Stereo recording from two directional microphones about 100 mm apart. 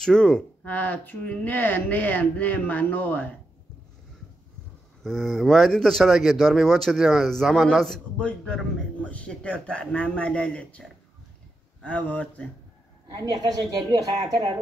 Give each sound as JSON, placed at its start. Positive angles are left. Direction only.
{"t": 0.0, "sound": "speech", "side_deg": 10}
{"t": 5.0, "sound": "a man's voice", "side_deg": 0}
{"t": 13.1, "sound": "a woman's voice", "side_deg": -40}